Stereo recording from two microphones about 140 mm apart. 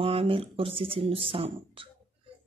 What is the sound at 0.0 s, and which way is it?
Speech, 40° right (ahead or behind).